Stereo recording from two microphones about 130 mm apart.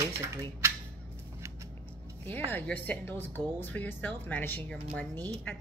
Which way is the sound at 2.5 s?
15° left (ahead or behind).